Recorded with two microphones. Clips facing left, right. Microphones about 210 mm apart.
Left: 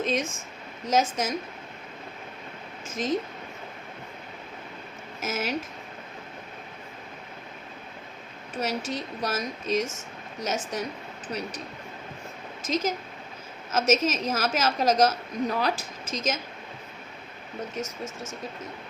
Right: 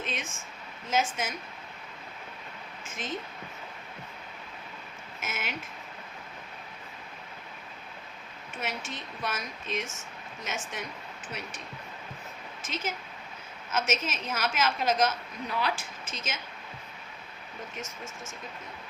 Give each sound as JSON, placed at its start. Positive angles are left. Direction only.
{"t": 0.0, "sound": "a woman's voice", "side_deg": 40}
{"t": 2.8, "sound": "a woman's voice", "side_deg": 40}
{"t": 5.2, "sound": "a woman's voice", "side_deg": 40}
{"t": 8.5, "sound": "a woman's voice", "side_deg": 40}
{"t": 12.6, "sound": "a woman's voice", "side_deg": 40}